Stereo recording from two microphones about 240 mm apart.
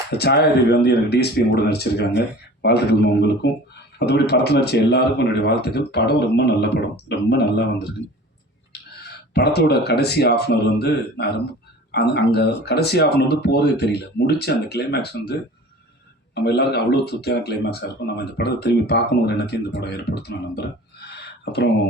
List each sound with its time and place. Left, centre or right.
0.2 s speech: left
9.3 s speech: left
21.2 s a sound: left